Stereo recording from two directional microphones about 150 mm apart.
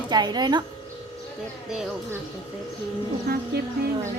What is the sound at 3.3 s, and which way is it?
Music, 90° right.